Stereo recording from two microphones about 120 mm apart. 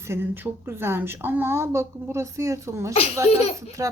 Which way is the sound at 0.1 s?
20° right (ahead or behind).